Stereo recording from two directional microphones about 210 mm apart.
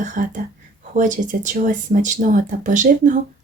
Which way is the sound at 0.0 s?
40° right (ahead or behind).